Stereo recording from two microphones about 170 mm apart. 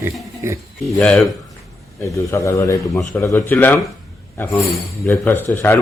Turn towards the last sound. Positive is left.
turn(degrees=10)  # may be behind; listen again after turning